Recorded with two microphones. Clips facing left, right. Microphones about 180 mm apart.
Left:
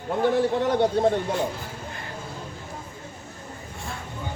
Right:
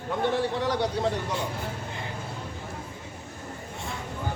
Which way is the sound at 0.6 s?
50° left (ahead or behind).